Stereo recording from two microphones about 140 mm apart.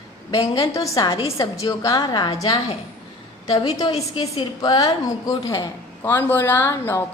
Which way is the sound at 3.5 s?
45° left (ahead or behind).